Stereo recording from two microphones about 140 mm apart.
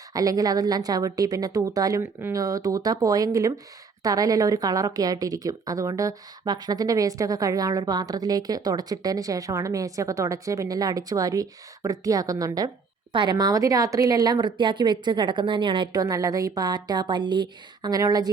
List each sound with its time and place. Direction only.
0.1 s a woman's voice: 25° right (ahead or behind)